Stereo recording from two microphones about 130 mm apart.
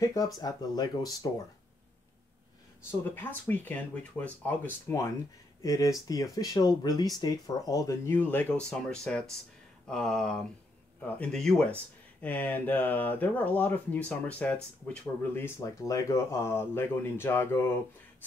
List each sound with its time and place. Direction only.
0.4 s speech: 30° left (ahead or behind)
3.2 s speech: 15° left (ahead or behind)
9.8 s a sound: 5° left (ahead or behind)
11.0 s speech: 5° left (ahead or behind)